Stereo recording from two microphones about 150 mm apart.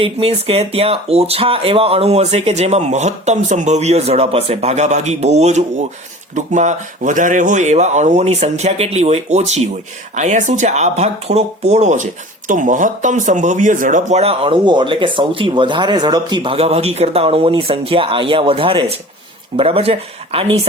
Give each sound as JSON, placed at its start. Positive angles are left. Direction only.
{"t": 0.0, "sound": "speech", "side_deg": -40}